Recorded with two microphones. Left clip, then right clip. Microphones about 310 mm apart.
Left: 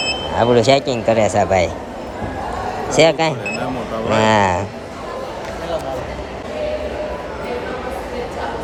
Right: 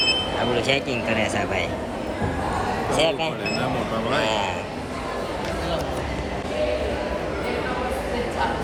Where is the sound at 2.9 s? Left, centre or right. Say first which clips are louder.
Left 10 dB; left.